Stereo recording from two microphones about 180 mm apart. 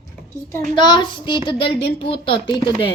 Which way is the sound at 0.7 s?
25° left (ahead or behind).